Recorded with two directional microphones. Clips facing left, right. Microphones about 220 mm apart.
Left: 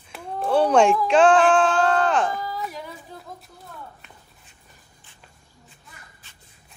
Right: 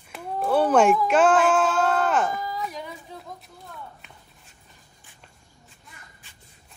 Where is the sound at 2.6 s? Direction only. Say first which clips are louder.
Even; centre (ahead or behind).